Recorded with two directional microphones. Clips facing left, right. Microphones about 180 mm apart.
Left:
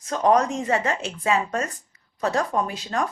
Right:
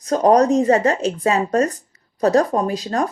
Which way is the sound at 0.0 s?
40° right (ahead or behind).